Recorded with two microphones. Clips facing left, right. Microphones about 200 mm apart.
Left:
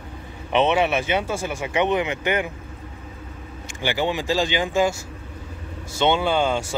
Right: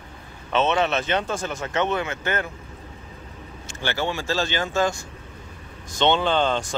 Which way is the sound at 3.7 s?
15° left (ahead or behind).